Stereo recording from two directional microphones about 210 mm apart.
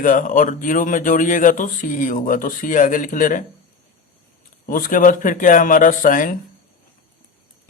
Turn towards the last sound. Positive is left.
turn(degrees=40)  # may be behind; listen again after turning